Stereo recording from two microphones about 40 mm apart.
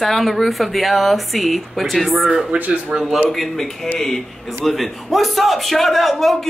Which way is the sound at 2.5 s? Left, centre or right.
Right.